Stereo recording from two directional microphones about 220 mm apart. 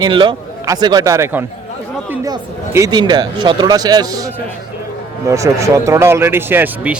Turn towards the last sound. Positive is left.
turn(degrees=-5)  # may be behind; listen again after turning